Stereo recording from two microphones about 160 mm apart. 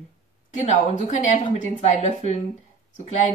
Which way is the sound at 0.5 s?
45° left (ahead or behind).